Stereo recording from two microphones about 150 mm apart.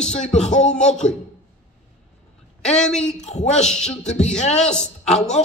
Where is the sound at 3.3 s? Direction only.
50° left (ahead or behind).